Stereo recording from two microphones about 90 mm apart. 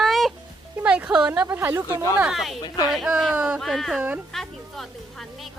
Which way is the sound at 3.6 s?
5° left (ahead or behind).